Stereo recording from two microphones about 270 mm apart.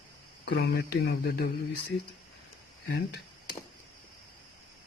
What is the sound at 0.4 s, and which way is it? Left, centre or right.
Speech, left.